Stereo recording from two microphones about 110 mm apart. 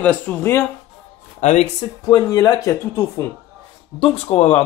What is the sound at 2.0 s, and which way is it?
Speech, 35° left (ahead or behind).